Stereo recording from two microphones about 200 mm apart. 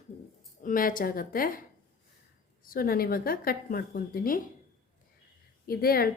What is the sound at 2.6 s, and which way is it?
A woman's voice, 45° left (ahead or behind).